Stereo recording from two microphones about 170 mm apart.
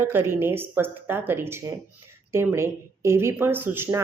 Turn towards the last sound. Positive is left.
turn(degrees=-15)  # may be behind; listen again after turning